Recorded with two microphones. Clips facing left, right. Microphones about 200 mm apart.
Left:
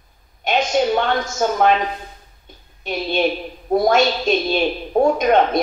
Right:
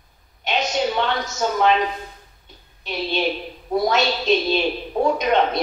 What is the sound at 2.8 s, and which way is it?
A woman's voice, 50° left (ahead or behind).